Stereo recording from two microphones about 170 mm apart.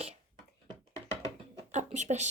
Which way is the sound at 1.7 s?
45° right (ahead or behind).